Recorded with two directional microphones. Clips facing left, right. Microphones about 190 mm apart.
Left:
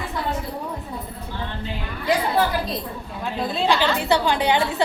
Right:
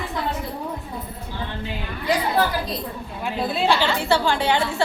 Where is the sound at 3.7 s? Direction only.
15° left (ahead or behind).